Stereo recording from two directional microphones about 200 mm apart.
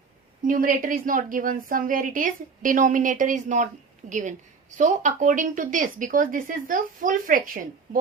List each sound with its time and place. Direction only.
0.4 s a woman's voice: 40° right (ahead or behind)